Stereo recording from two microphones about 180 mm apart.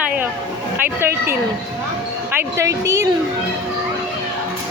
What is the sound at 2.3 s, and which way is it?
Speech, 15° right (ahead or behind).